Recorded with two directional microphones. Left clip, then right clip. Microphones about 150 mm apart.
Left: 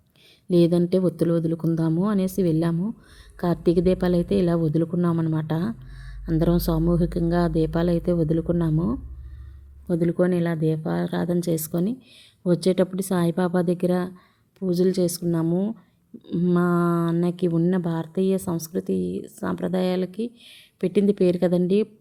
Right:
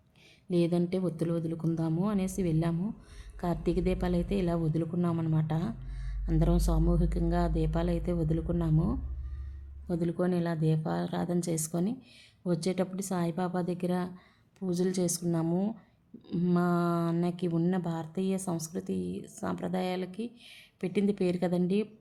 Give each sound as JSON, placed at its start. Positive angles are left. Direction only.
{"t": 0.5, "sound": "a woman's voice", "side_deg": 30}
{"t": 16.2, "sound": "a sound", "side_deg": 15}
{"t": 16.6, "sound": "a woman's voice", "side_deg": 25}